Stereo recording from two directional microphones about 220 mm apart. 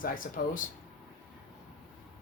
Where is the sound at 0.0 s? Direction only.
40° left (ahead or behind).